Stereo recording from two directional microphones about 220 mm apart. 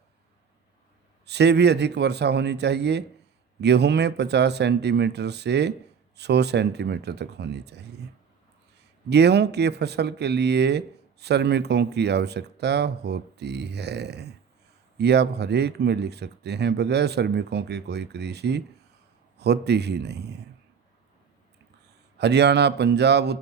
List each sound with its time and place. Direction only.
1.2 s speech: 50° right (ahead or behind)
9.0 s speech: 50° right (ahead or behind)
22.2 s speech: 50° right (ahead or behind)